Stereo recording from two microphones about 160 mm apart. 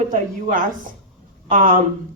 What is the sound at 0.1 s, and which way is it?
A woman's voice, 55° right (ahead or behind).